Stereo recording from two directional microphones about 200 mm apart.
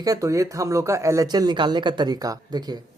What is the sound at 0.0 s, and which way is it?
Speech, 15° right (ahead or behind).